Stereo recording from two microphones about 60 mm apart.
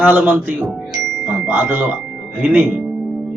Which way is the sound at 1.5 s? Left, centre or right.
Right.